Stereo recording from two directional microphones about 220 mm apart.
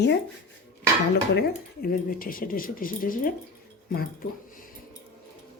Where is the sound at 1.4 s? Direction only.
40° left (ahead or behind).